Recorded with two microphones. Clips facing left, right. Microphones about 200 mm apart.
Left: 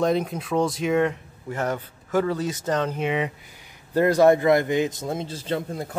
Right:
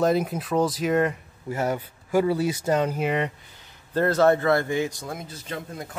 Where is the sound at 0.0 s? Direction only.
5° right (ahead or behind).